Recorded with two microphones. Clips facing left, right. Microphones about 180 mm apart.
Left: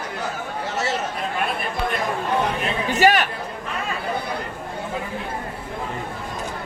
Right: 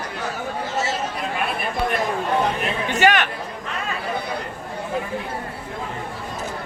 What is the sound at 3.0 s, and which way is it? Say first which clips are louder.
Speech: left 1 dB; 35° left (ahead or behind).